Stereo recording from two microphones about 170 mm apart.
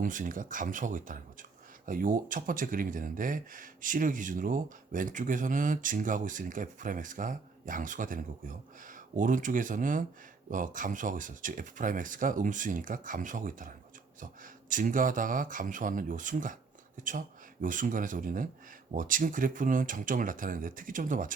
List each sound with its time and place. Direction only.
0.0 s speech: 50° right (ahead or behind)